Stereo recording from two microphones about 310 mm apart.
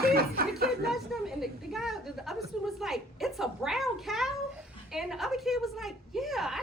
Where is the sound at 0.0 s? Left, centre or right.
Right.